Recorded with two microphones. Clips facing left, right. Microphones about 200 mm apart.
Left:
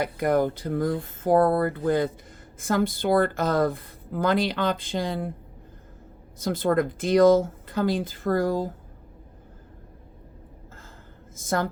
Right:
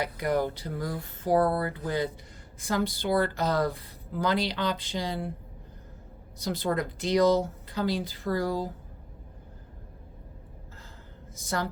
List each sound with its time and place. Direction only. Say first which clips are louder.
0.0 s a woman's voice: left 5 dB; 50° left (ahead or behind)
6.4 s a woman's voice: left 6 dB; 50° left (ahead or behind)
11.3 s a woman's voice: left 5 dB; 50° left (ahead or behind)